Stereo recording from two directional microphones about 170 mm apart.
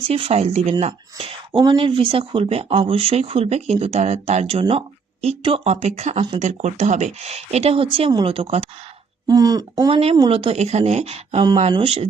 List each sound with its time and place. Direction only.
0.1 s speech: 35° right (ahead or behind)
9.2 s speech: 20° right (ahead or behind)